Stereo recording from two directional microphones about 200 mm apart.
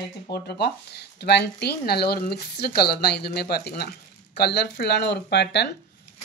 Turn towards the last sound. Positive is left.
turn(degrees=55)  # may be behind; listen again after turning